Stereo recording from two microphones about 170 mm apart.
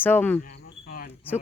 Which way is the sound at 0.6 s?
55° left (ahead or behind).